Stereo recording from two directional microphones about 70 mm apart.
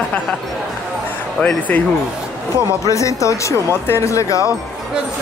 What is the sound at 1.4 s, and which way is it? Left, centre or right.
Speech, centre.